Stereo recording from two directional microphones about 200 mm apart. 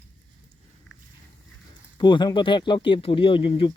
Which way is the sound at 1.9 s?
20° left (ahead or behind).